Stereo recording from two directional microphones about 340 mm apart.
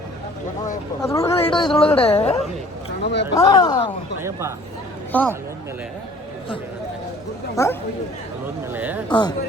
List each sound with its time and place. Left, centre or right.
1.1 s speech: centre
3.0 s speech: left
3.3 s speech: centre
4.2 s speech: centre
5.1 s speech: centre
7.5 s speech: centre
8.7 s speech: centre